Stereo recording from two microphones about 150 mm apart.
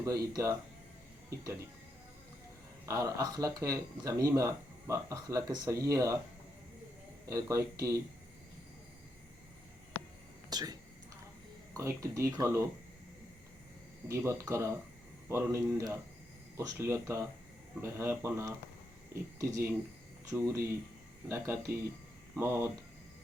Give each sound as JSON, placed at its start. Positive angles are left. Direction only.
{"t": 0.0, "sound": "speech", "side_deg": -20}
{"t": 2.8, "sound": "speech", "side_deg": -20}
{"t": 7.3, "sound": "speech", "side_deg": -20}
{"t": 10.5, "sound": "speech", "side_deg": -25}
{"t": 11.8, "sound": "speech", "side_deg": -20}
{"t": 14.4, "sound": "speech", "side_deg": -20}